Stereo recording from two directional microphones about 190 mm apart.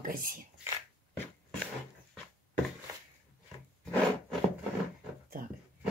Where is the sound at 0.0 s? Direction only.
45° right (ahead or behind).